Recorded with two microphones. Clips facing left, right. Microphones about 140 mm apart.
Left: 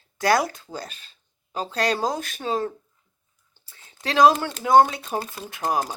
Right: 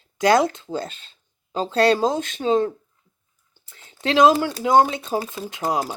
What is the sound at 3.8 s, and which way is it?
Speech, 25° right (ahead or behind).